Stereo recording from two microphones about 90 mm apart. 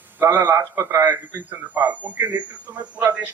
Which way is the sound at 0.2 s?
20° right (ahead or behind).